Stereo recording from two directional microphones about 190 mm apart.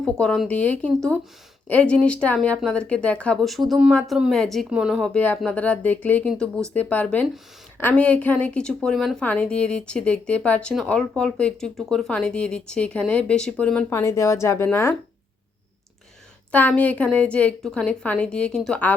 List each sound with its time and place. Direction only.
0.0 s a woman's voice: 5° left (ahead or behind)
16.5 s a woman's voice: 10° left (ahead or behind)